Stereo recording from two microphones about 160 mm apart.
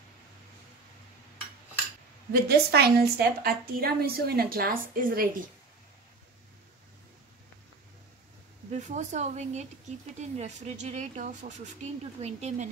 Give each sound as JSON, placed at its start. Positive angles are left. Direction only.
{"t": 2.4, "sound": "a woman's voice", "side_deg": -80}
{"t": 8.7, "sound": "speech", "side_deg": -45}